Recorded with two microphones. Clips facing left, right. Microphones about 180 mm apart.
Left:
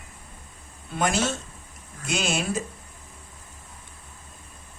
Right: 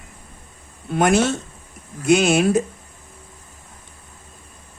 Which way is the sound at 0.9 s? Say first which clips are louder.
Right 8 dB; 65° right (ahead or behind).